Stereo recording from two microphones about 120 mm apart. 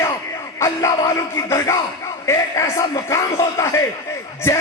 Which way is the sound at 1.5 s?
25° left (ahead or behind).